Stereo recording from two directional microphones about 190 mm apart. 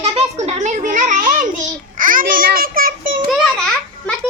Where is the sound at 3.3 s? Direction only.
Centre (ahead or behind).